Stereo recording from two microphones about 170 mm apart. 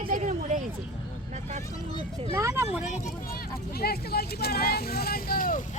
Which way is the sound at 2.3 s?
20° right (ahead or behind).